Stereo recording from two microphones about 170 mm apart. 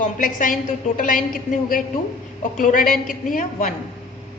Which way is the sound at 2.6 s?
50° left (ahead or behind).